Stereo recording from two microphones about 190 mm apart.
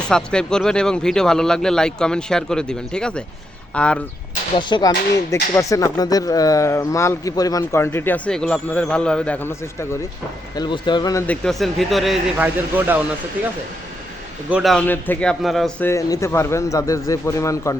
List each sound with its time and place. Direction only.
0.1 s speech: 5° left (ahead or behind)
4.5 s speech: 20° left (ahead or behind)
10.5 s speech: 25° left (ahead or behind)
11.3 s speech: centre (ahead or behind)
14.5 s speech: centre (ahead or behind)
15.9 s speech: 15° left (ahead or behind)